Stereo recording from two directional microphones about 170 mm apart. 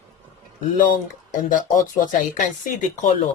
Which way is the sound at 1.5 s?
50° left (ahead or behind).